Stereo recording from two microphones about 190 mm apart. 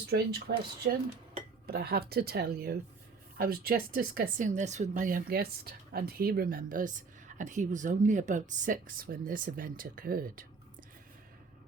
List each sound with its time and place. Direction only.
0.1 s speech: 55° right (ahead or behind)
1.6 s speech: 55° right (ahead or behind)